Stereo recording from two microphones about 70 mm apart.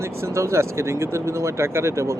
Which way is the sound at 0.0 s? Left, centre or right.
Right.